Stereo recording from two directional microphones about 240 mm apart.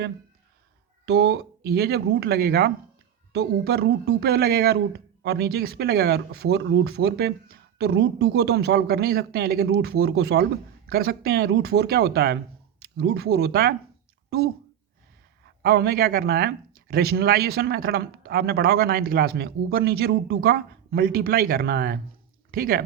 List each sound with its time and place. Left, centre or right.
1.0 s speech: right